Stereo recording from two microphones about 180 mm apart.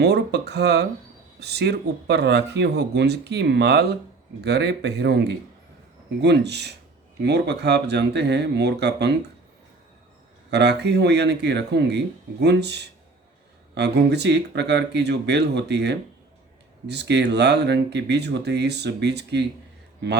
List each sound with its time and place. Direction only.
0.0 s speech: 65° right (ahead or behind)
10.5 s speech: 70° right (ahead or behind)